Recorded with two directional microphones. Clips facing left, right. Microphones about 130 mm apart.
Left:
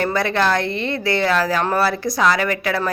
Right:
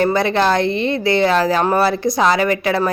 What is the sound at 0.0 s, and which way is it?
A woman's voice, 20° right (ahead or behind).